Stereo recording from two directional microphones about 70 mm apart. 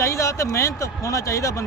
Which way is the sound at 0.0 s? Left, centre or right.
Left.